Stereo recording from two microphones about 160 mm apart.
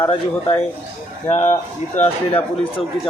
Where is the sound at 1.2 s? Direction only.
45° left (ahead or behind).